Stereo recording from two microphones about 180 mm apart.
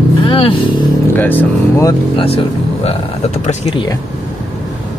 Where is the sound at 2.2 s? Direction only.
30° left (ahead or behind).